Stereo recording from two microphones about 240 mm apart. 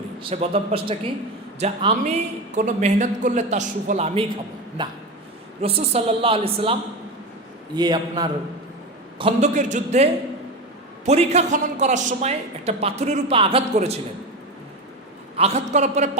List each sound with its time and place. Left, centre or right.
0.2 s a woman's voice: right
7.8 s a man's voice: centre
15.4 s a woman's voice: right